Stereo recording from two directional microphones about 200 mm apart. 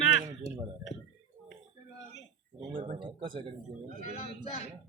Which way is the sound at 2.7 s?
30° right (ahead or behind).